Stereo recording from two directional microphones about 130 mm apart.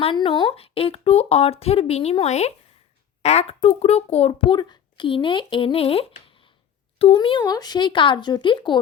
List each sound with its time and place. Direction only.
0.0 s a child's voice: 40° left (ahead or behind)